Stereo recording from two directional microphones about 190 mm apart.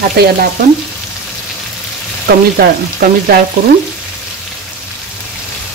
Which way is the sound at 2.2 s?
55° right (ahead or behind).